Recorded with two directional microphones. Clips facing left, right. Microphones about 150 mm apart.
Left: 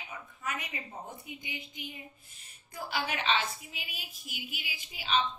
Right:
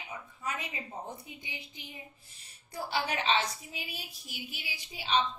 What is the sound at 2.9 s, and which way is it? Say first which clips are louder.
A woman's voice: right 1 dB; 35° right (ahead or behind).